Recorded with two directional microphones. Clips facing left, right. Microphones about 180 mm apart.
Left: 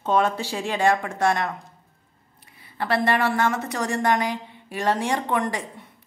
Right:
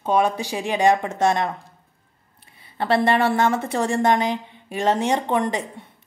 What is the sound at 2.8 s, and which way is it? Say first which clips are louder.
A woman's voice: right 3 dB; 25° right (ahead or behind).